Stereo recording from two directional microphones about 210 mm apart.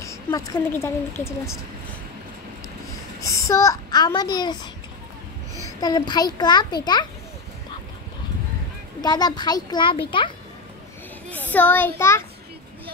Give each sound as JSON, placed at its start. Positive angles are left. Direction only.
{"t": 0.0, "sound": "a woman's voice", "side_deg": 15}
{"t": 3.2, "sound": "a child's voice", "side_deg": 15}
{"t": 5.8, "sound": "a child's voice", "side_deg": 20}
{"t": 9.0, "sound": "a child's voice", "side_deg": 20}
{"t": 11.2, "sound": "child singing", "side_deg": 10}
{"t": 12.0, "sound": "a woman's voice", "side_deg": 15}